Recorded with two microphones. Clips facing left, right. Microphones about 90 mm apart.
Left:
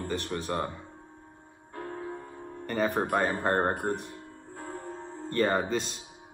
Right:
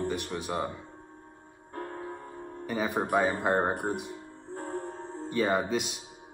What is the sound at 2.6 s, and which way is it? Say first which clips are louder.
Speech: left 2 dB; 10° right (ahead or behind).